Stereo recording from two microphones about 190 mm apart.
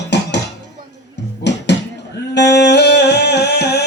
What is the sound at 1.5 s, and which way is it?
Music, 65° left (ahead or behind).